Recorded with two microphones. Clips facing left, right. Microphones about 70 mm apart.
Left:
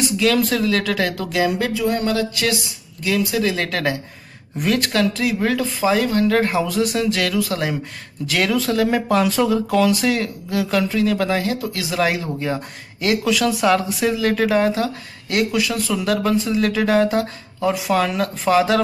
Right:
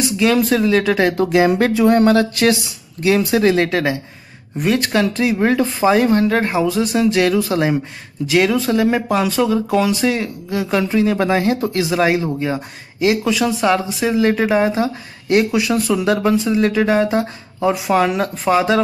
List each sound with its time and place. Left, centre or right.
0.2 s speech: centre; by 3.6 s right
3.6 s speech: centre
7.2 s speech: right; by 9.6 s centre
9.7 s speech: centre
10.9 s speech: right
12.3 s speech: centre
14.2 s speech: centre